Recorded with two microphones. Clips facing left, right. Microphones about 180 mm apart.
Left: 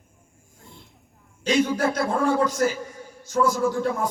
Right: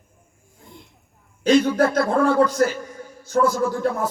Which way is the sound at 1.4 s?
55° right (ahead or behind).